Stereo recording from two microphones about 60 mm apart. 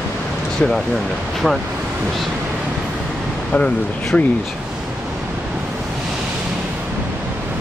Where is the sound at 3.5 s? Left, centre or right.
Centre.